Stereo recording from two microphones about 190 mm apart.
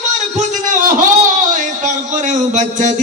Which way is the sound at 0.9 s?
45° right (ahead or behind).